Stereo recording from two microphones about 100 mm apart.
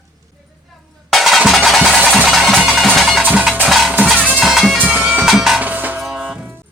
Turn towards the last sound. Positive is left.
turn(degrees=-10)  # may be behind; listen again after turning